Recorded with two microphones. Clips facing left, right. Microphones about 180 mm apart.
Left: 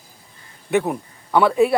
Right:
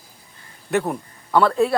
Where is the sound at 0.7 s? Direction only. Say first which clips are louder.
Left 2 dB; centre (ahead or behind).